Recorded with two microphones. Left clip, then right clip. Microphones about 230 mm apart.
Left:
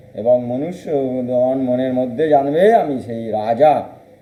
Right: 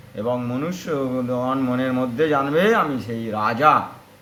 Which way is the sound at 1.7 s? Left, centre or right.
Right.